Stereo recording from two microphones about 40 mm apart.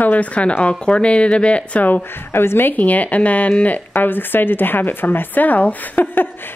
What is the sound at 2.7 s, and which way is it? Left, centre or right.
Speech, left.